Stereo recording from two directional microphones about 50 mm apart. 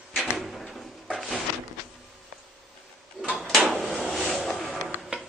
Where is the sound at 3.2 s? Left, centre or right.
Right.